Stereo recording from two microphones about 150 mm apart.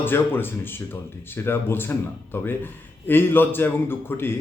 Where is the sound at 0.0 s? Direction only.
15° left (ahead or behind).